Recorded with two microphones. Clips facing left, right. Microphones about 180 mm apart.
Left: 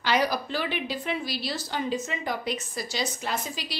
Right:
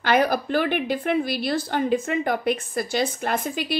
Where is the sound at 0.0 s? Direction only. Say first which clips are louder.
Right 5 dB; 55° right (ahead or behind).